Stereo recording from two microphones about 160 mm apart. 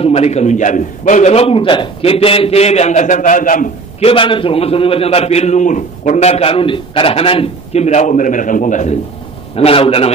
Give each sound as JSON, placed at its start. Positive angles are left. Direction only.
{"t": 0.0, "sound": "a man's voice", "side_deg": 40}
{"t": 4.0, "sound": "a man's voice", "side_deg": 35}
{"t": 9.6, "sound": "a man's voice", "side_deg": 35}